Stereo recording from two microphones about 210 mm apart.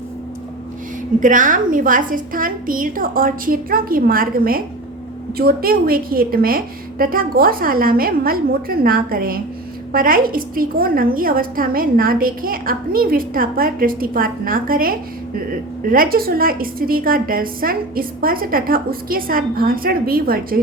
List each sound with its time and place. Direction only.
1.2 s a woman's voice: 40° right (ahead or behind)